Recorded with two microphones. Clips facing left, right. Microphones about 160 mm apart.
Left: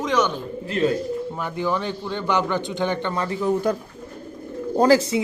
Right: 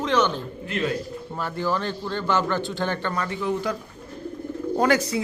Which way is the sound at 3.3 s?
40° left (ahead or behind).